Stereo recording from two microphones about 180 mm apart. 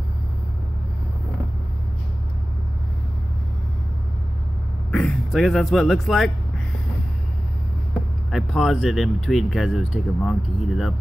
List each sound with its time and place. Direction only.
4.9 s speech: 5° left (ahead or behind)
8.3 s speech: centre (ahead or behind)